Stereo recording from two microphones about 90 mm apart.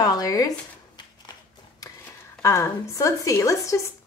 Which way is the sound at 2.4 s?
35° left (ahead or behind).